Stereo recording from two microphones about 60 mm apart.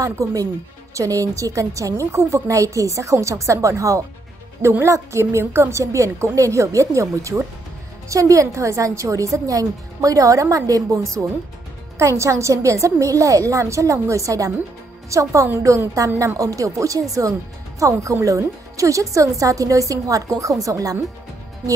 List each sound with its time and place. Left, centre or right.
0.0 s a woman's voice: right
4.6 s a woman's voice: right
18.0 s a woman's voice: right